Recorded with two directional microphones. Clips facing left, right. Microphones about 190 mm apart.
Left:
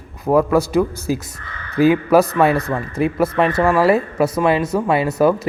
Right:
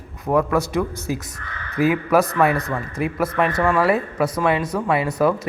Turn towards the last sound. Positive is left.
turn(degrees=25)  # may be behind; listen again after turning